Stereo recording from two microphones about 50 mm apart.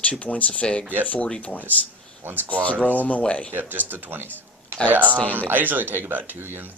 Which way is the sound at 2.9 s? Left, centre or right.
Left.